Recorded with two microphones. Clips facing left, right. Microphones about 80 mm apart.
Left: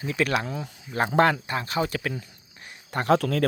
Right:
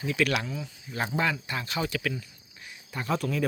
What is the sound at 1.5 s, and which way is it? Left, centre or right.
Speech, left.